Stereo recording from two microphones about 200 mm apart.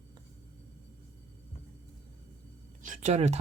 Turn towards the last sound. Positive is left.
turn(degrees=-35)  # may be behind; listen again after turning